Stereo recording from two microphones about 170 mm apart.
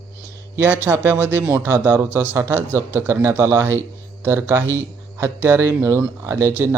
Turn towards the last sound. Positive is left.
turn(degrees=-15)  # may be behind; listen again after turning